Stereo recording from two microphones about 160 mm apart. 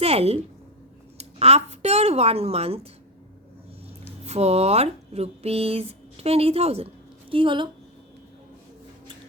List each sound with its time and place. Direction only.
0.0 s a woman's voice: 40° right (ahead or behind)
4.3 s speech: 40° right (ahead or behind)